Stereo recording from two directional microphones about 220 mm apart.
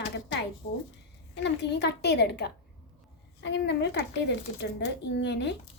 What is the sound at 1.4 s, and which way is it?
A woman's voice, 50° left (ahead or behind).